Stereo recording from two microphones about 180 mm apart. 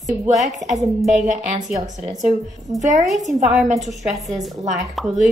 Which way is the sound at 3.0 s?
Centre (ahead or behind).